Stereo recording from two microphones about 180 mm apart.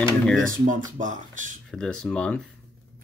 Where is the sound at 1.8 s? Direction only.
5° left (ahead or behind).